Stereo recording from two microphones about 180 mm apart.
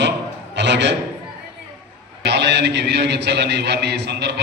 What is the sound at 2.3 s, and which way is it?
A man's voice, 75° right (ahead or behind).